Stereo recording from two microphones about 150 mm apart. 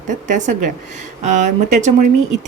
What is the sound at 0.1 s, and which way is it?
Speech, 55° right (ahead or behind).